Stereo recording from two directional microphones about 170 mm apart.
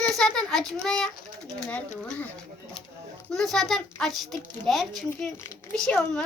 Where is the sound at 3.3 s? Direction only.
Centre (ahead or behind).